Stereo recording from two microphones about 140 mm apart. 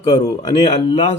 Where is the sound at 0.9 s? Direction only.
45° left (ahead or behind).